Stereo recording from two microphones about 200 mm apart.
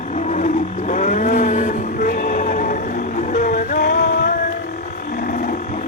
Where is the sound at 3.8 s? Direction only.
60° left (ahead or behind).